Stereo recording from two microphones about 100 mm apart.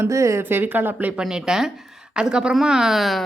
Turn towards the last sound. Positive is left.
turn(degrees=0)  # may be behind; listen again after turning